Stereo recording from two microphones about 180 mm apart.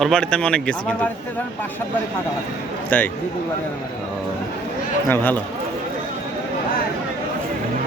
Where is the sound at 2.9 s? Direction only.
10° left (ahead or behind).